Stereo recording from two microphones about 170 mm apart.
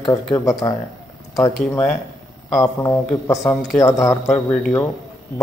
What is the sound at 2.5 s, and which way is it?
Speech, 20° left (ahead or behind).